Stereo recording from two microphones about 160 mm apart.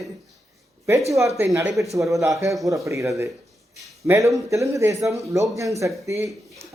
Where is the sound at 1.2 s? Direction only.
20° right (ahead or behind).